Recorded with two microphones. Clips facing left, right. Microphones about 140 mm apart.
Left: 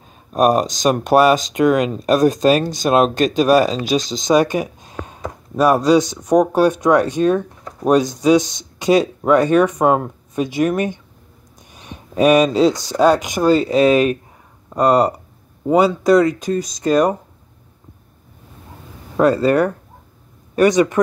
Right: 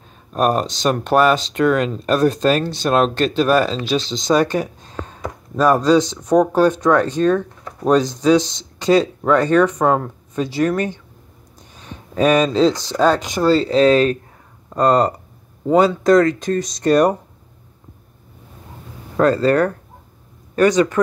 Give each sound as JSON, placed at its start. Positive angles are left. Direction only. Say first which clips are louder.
{"t": 0.3, "sound": "speech", "louder": "left 3 dB", "side_deg": 15}
{"t": 19.1, "sound": "speech", "louder": "left 1 dB", "side_deg": 15}